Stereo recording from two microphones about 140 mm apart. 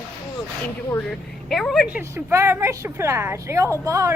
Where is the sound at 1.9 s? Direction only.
15° right (ahead or behind).